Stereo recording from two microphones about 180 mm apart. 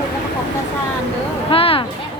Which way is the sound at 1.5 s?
30° left (ahead or behind).